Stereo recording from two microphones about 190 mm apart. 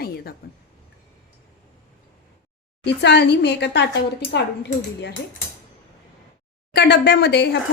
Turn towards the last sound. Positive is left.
turn(degrees=60)  # may be behind; listen again after turning